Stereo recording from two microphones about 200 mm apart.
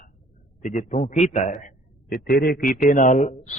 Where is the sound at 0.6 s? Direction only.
40° left (ahead or behind).